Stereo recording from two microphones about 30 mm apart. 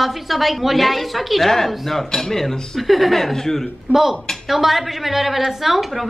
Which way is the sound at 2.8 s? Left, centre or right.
Centre.